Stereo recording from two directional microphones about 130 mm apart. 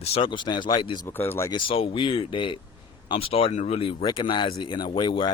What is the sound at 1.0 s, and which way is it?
Speech, 20° left (ahead or behind).